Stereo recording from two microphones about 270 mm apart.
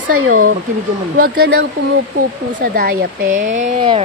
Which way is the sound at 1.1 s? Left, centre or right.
Right.